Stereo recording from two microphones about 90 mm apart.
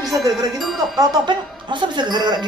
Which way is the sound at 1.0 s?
50° right (ahead or behind).